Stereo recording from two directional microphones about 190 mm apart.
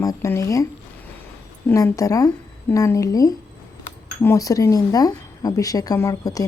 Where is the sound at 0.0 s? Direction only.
15° left (ahead or behind).